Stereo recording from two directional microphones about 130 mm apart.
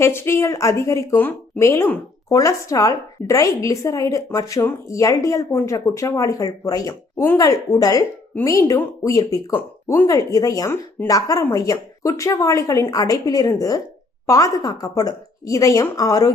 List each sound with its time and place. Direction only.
0.0 s speech: 20° left (ahead or behind)